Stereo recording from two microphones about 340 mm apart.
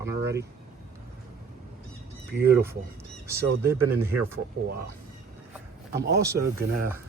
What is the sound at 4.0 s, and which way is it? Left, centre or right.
Speech, centre.